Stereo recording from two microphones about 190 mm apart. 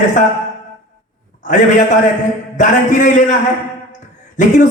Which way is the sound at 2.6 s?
40° left (ahead or behind).